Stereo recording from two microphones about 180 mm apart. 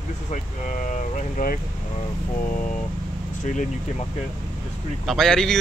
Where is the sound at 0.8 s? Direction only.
45° left (ahead or behind).